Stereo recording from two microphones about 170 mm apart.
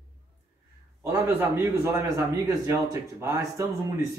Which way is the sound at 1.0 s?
15° right (ahead or behind).